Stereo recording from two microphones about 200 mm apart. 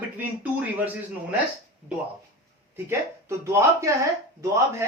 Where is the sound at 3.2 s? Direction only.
15° right (ahead or behind).